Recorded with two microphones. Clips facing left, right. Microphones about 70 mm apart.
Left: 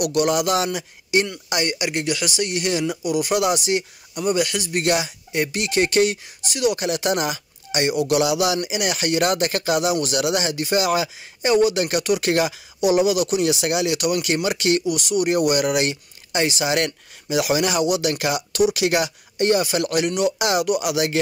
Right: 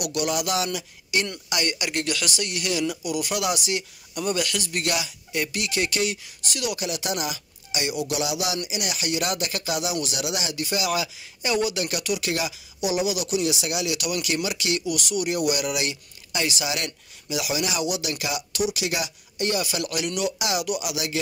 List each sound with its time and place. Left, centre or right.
0.0 s speech: left
4.1 s speech: centre; by 6.3 s left
6.5 s speech: left
6.8 s speech: left
19.3 s speech: left
20.3 s speech: left